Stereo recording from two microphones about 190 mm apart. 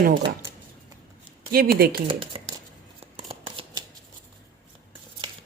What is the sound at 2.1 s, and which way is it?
Speech, 30° right (ahead or behind).